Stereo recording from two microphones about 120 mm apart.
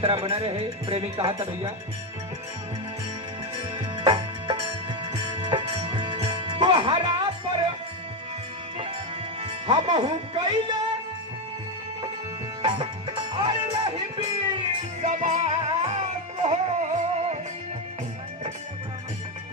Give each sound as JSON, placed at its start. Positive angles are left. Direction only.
{"t": 0.0, "sound": "music", "side_deg": -50}
{"t": 1.1, "sound": "speech", "side_deg": -40}
{"t": 3.8, "sound": "music", "side_deg": -45}
{"t": 9.4, "sound": "speech", "side_deg": -45}
{"t": 13.3, "sound": "music", "side_deg": -45}
{"t": 15.0, "sound": "music", "side_deg": -90}